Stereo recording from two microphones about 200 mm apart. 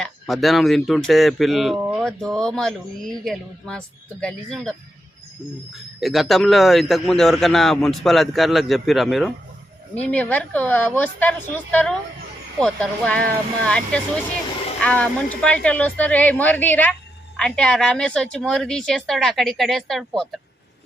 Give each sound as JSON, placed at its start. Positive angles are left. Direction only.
{"t": 0.0, "sound": "a man's voice", "side_deg": 0}
{"t": 5.7, "sound": "a man's voice", "side_deg": 0}